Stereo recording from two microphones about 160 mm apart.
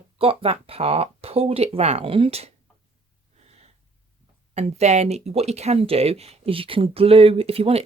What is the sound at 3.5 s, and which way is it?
Snort, 40° right (ahead or behind).